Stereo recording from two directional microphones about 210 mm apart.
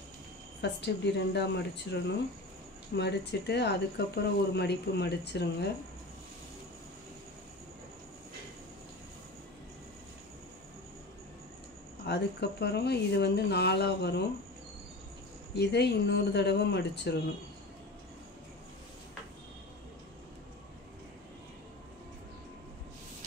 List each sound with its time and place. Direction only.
0.6 s speech: 55° left (ahead or behind)
12.1 s speech: 50° left (ahead or behind)
15.5 s speech: 50° left (ahead or behind)